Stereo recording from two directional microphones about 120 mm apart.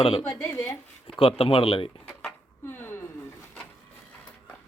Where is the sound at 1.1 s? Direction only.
50° left (ahead or behind).